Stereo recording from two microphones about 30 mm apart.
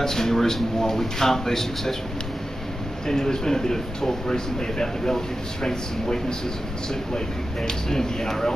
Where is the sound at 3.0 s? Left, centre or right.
Centre.